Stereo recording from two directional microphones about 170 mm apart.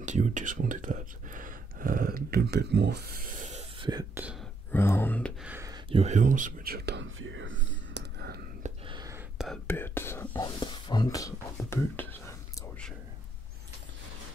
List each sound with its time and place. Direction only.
0.0 s speech: 45° right (ahead or behind)
4.1 s speech: 10° right (ahead or behind)
4.7 s speech: 15° left (ahead or behind)
5.4 s speech: 10° right (ahead or behind)
5.7 s whispering: 35° right (ahead or behind); by 8.4 s 80° right
8.8 s whispering: 25° right (ahead or behind)
9.7 s speech: 15° left (ahead or behind)
10.3 s speech: 25° left (ahead or behind)